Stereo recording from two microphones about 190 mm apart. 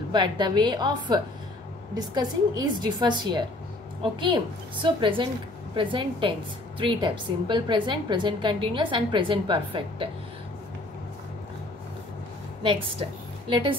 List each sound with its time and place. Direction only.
0.1 s a woman's voice: 25° right (ahead or behind)
13.5 s a woman's voice: 25° right (ahead or behind)